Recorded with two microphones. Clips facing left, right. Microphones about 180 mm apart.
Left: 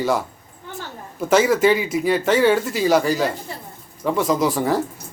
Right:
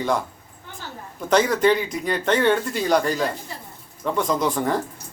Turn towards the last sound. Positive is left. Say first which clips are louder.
# left 3 dB
turn(degrees=5)  # may be behind; listen again after turning